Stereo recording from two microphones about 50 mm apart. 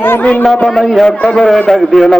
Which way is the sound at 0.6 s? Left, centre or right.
Centre.